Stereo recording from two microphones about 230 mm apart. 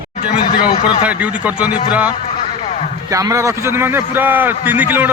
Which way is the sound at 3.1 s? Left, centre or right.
Centre.